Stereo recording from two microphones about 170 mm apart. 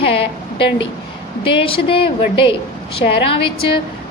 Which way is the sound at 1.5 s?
30° left (ahead or behind).